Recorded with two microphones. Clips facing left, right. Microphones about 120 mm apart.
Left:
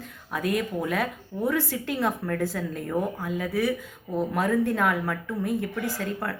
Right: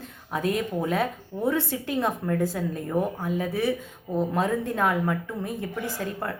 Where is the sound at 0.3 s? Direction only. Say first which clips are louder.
Right 1 dB; 25° right (ahead or behind).